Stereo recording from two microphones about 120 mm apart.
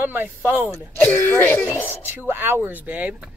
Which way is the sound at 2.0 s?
15° right (ahead or behind).